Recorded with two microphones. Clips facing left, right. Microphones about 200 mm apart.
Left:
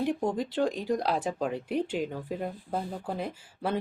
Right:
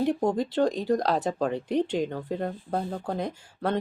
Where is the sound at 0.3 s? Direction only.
10° left (ahead or behind).